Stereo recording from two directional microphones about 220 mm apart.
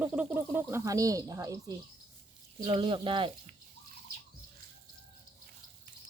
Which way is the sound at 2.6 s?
20° right (ahead or behind).